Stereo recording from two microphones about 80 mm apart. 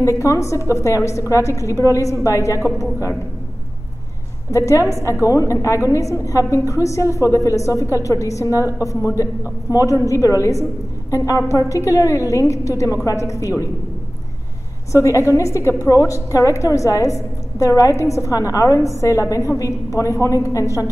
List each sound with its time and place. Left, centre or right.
0.2 s a woman's voice: left
4.5 s a woman's voice: left
14.9 s a woman's voice: left